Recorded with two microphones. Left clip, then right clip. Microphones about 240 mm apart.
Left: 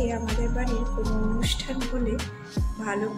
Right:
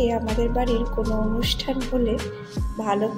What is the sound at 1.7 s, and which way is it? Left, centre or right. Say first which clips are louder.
Speech: right 6 dB; centre.